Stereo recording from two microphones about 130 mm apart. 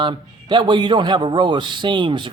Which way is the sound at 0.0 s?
35° right (ahead or behind).